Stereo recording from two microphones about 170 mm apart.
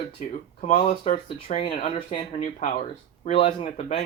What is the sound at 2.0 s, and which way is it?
Speech, 30° left (ahead or behind).